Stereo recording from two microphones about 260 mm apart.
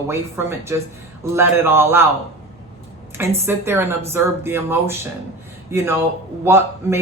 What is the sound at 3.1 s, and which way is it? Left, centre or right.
A woman's voice, centre.